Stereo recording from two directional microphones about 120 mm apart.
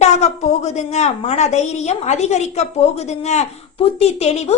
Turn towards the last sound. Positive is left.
turn(degrees=60)  # may be behind; listen again after turning